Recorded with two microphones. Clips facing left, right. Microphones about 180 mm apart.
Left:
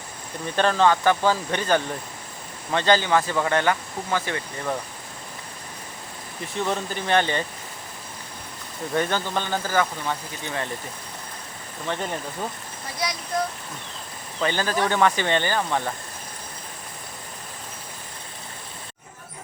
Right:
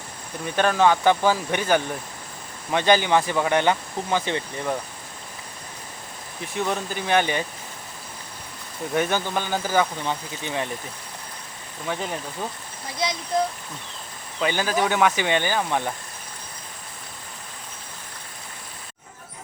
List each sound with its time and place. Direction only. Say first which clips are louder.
0.5 s speech: even; 10° right (ahead or behind)
6.7 s speech: even; 5° right (ahead or behind)
8.9 s speech: right 1 dB; 10° right (ahead or behind)
11.9 s speech: even; centre (ahead or behind)
13.0 s speech: right 2 dB; 25° right (ahead or behind)
14.4 s speech: right 1 dB; 10° right (ahead or behind)